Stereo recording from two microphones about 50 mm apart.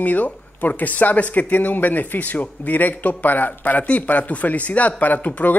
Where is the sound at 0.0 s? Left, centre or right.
Left.